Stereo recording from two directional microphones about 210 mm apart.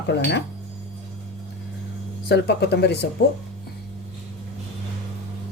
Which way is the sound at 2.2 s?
50° left (ahead or behind).